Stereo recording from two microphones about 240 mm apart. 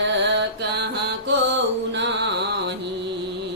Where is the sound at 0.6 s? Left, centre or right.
Right.